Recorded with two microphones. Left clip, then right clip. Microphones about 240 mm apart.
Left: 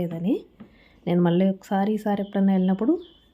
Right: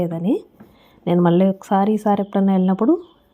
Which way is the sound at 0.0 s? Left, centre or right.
Centre.